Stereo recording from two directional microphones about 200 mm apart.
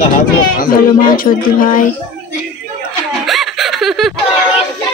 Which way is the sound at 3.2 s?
Centre (ahead or behind).